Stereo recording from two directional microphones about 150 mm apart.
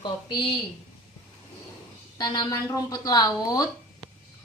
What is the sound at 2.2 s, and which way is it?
Speech, 30° left (ahead or behind).